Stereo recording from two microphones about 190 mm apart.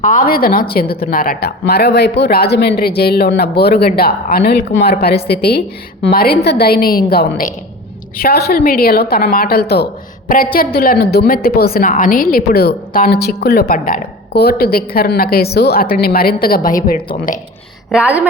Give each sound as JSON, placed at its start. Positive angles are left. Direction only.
{"t": 0.0, "sound": "a woman's voice", "side_deg": 45}
{"t": 17.9, "sound": "speech", "side_deg": -5}